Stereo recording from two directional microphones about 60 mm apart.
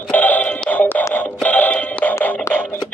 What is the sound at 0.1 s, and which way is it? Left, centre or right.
Music, left.